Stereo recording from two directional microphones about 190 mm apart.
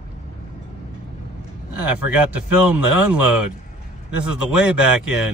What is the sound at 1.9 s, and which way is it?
A man's voice, 5° right (ahead or behind).